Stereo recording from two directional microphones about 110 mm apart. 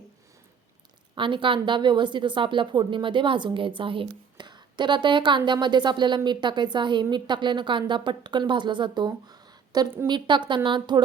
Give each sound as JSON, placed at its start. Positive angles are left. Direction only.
{"t": 1.1, "sound": "a woman's voice", "side_deg": -50}